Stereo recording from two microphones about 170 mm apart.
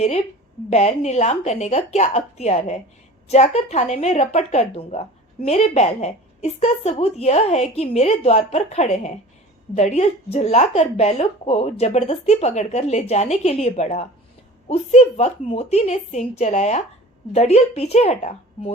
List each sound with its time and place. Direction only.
0.7 s a woman's voice: 40° left (ahead or behind)